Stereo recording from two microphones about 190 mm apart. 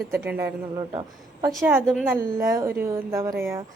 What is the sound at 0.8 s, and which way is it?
A woman's voice, 20° right (ahead or behind).